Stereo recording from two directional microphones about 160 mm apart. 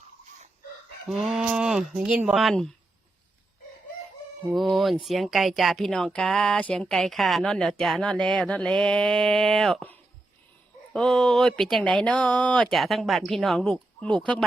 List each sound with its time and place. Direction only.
1.1 s speech: centre (ahead or behind)
4.5 s speech: centre (ahead or behind)